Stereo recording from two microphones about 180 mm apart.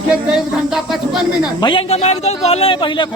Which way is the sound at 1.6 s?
30° left (ahead or behind).